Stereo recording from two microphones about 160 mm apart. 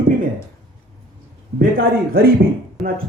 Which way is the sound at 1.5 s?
70° right (ahead or behind).